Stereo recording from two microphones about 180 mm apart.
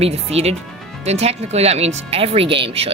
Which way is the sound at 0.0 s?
35° right (ahead or behind).